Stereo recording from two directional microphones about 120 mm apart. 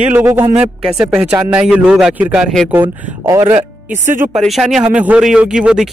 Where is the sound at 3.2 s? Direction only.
25° right (ahead or behind).